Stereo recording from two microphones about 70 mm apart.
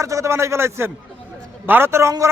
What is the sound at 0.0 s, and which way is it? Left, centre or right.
A man's voice, right.